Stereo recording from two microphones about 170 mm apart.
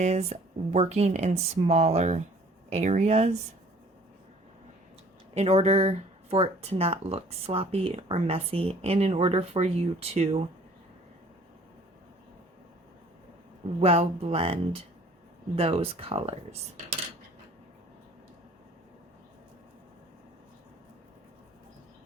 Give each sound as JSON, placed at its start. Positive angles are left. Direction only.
{"t": 0.0, "sound": "speech", "side_deg": -40}
{"t": 5.3, "sound": "speech", "side_deg": -40}
{"t": 13.7, "sound": "speech", "side_deg": -35}